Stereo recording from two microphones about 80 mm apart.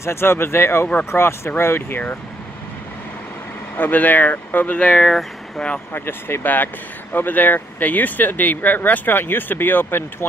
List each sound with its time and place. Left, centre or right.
0.0 s speech: left
3.7 s speech: left
5.9 s speech: left